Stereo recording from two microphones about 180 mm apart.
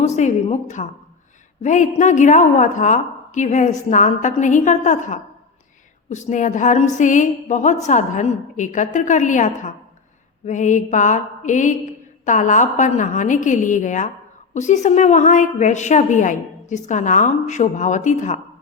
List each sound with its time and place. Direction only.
0.0 s a woman's voice: 40° left (ahead or behind)